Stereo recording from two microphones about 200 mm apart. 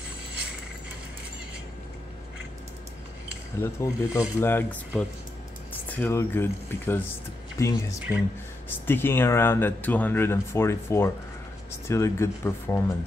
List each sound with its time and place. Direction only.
3.5 s speech: 15° left (ahead or behind)